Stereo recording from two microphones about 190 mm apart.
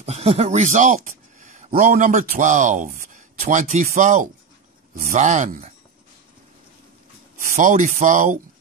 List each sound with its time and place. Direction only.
0.0 s speech: 35° right (ahead or behind)
7.5 s speech: 40° right (ahead or behind)